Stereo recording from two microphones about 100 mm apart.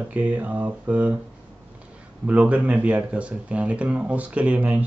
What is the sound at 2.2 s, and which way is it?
Speech, 15° right (ahead or behind).